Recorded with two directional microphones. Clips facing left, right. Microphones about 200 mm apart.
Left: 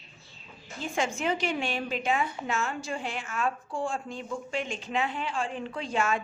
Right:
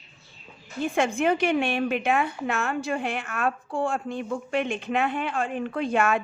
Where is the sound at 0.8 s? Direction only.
55° right (ahead or behind).